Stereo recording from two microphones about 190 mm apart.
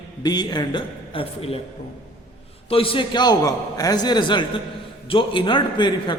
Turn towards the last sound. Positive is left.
turn(degrees=25)  # may be behind; listen again after turning